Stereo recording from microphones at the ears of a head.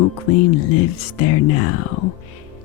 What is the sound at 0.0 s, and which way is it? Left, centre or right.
Speech, left.